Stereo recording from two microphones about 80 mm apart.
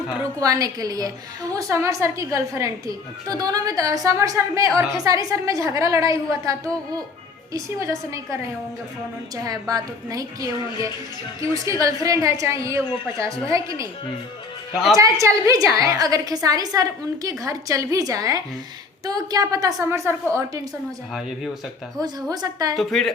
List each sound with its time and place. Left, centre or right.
0.3 s a woman's voice: right
3.2 s a woman's voice: right
14.9 s a woman's voice: right
19.8 s a woman's voice: right
21.1 s speech: centre
21.9 s a woman's voice: right
22.7 s speech: centre